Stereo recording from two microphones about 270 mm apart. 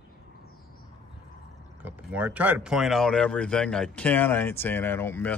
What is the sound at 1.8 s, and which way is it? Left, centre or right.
Speech, centre.